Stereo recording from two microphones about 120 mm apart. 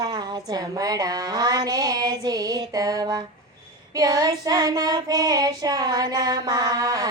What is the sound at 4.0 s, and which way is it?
Child singing, 30° right (ahead or behind).